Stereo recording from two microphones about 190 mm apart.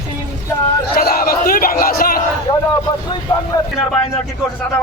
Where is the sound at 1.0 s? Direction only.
50° left (ahead or behind).